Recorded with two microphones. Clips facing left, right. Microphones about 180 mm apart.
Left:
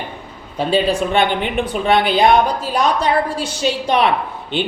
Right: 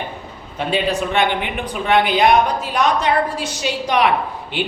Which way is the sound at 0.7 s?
35° left (ahead or behind).